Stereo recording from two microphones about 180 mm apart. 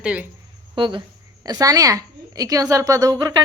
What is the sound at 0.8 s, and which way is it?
A woman's voice, 25° right (ahead or behind).